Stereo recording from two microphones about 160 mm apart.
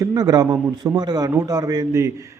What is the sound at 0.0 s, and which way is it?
A man's voice, 20° right (ahead or behind).